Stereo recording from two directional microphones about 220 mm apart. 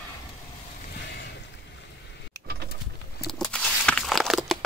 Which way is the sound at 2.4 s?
45° right (ahead or behind).